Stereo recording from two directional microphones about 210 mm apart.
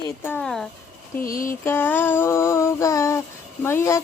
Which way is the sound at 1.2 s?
40° left (ahead or behind).